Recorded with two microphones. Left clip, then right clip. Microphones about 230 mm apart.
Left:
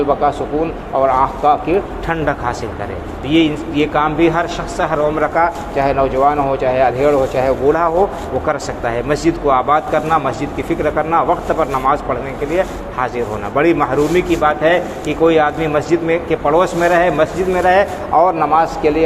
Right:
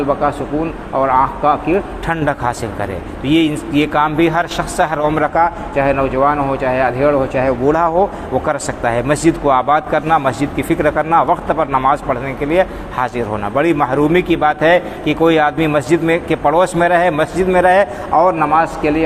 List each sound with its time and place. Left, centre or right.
0.1 s a man's voice: right